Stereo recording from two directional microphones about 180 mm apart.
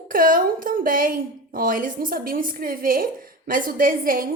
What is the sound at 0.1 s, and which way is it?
A woman's voice, 50° right (ahead or behind).